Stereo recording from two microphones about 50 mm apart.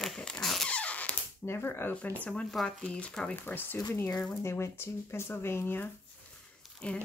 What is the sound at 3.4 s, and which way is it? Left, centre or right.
Speech, left.